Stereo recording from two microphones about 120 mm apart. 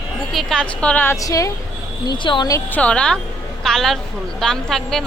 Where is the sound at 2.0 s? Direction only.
40° left (ahead or behind).